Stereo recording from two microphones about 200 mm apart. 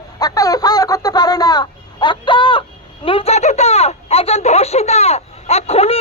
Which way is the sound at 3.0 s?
30° left (ahead or behind).